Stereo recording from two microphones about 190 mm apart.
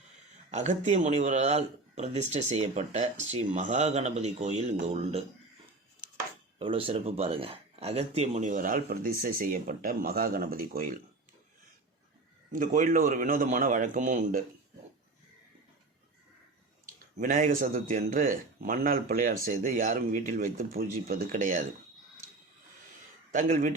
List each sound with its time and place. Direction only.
0.5 s speech: 40° right (ahead or behind)
6.6 s speech: 30° right (ahead or behind); by 10.9 s 50° right (ahead or behind)
12.5 s speech: 45° right (ahead or behind)
16.8 s speech: 45° right (ahead or behind)
23.3 s speech: 45° right (ahead or behind)